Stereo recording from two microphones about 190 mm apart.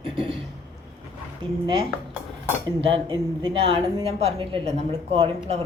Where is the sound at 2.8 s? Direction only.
25° right (ahead or behind).